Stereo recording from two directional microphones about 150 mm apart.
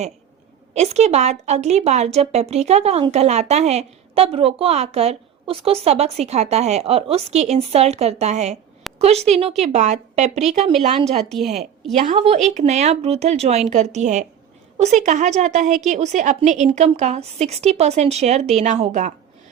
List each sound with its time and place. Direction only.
0.7 s speech: 45° right (ahead or behind)
11.3 s a woman's voice: centre (ahead or behind)
11.9 s speech: 50° right (ahead or behind)